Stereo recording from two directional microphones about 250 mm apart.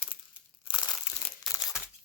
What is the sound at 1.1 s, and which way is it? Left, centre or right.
Crumpling, left.